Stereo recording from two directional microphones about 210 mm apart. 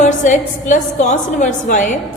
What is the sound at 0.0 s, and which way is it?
A woman's voice, 35° left (ahead or behind).